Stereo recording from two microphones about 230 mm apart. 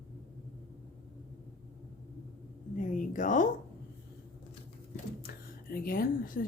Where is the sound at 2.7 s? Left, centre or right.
Left.